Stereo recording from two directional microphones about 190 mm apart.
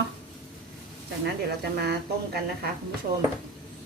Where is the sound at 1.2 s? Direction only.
60° right (ahead or behind).